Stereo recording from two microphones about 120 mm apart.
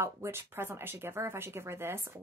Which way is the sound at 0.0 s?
20° right (ahead or behind).